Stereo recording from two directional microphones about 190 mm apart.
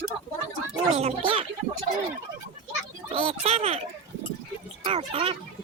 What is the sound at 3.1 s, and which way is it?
Speech, 30° right (ahead or behind).